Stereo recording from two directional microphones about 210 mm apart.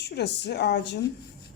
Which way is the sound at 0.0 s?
55° left (ahead or behind).